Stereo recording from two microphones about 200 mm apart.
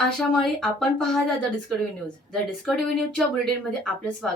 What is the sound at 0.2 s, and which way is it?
Speech, centre (ahead or behind).